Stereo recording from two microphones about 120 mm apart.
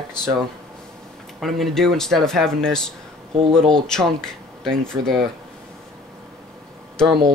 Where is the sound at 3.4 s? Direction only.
45° right (ahead or behind).